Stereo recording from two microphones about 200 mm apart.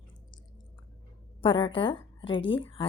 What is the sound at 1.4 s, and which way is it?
A woman's voice, 25° left (ahead or behind).